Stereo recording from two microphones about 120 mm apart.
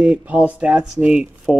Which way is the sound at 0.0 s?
10° right (ahead or behind).